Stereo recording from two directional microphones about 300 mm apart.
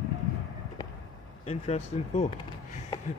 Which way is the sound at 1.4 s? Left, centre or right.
Left.